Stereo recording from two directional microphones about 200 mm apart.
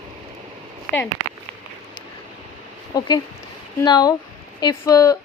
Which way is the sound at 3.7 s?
20° left (ahead or behind).